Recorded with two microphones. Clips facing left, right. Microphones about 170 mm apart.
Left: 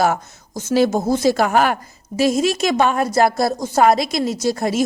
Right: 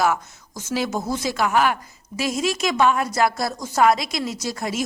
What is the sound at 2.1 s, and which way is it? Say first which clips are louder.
A woman's voice: left 7 dB; 30° left (ahead or behind).